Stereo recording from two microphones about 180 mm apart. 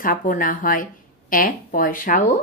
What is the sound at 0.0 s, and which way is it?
A woman's voice, 50° left (ahead or behind).